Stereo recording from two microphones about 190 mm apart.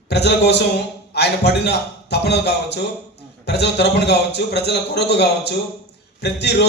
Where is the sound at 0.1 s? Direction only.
60° left (ahead or behind).